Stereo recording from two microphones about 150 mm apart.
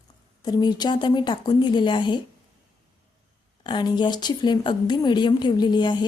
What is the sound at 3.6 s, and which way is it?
A woman's voice, 30° left (ahead or behind).